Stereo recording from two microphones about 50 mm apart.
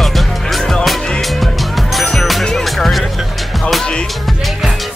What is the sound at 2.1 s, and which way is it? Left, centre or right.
Music, centre.